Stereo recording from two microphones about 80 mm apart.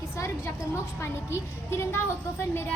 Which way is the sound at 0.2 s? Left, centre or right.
Left.